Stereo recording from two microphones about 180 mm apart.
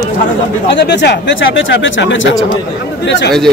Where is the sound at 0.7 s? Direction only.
75° left (ahead or behind).